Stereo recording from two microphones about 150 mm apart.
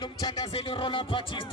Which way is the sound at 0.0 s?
30° left (ahead or behind).